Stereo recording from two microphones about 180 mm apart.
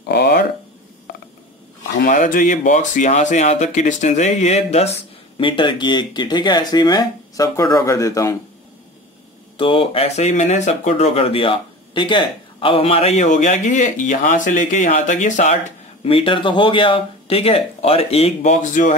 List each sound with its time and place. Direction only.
0.1 s a sound: 65° left (ahead or behind)
2.0 s speech: 50° left (ahead or behind); by 8.4 s 15° left (ahead or behind)
9.6 s speech: 30° left (ahead or behind)
16.0 s speech: 30° left (ahead or behind)